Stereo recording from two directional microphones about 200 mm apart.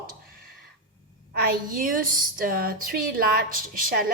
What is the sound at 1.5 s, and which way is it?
Speech, 45° right (ahead or behind).